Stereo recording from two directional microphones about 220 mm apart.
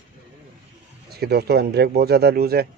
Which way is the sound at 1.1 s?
45° right (ahead or behind).